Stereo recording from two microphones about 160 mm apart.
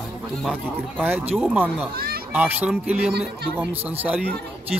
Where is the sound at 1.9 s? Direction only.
70° right (ahead or behind).